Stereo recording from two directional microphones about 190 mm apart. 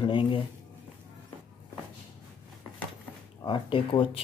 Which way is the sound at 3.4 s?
25° left (ahead or behind).